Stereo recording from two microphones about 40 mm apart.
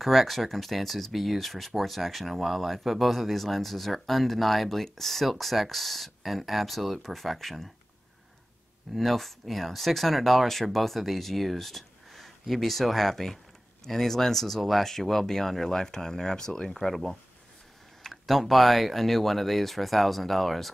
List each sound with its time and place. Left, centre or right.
0.0 s speech: centre
8.9 s speech: centre